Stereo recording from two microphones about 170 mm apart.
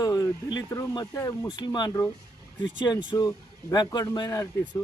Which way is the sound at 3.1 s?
20° left (ahead or behind).